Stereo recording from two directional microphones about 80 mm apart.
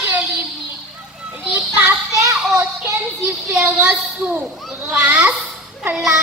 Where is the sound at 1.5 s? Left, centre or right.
Centre.